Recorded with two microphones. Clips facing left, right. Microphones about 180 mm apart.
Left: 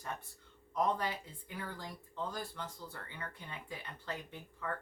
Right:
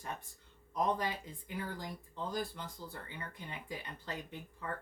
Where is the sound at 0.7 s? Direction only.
15° right (ahead or behind).